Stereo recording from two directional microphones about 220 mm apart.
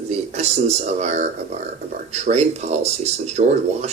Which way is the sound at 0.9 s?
30° right (ahead or behind).